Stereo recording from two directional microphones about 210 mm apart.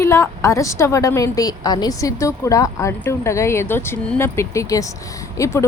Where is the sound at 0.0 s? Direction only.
15° left (ahead or behind).